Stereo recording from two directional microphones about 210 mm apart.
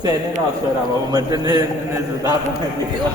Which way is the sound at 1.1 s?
20° right (ahead or behind).